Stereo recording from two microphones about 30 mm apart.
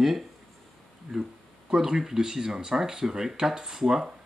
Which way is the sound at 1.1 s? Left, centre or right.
Right.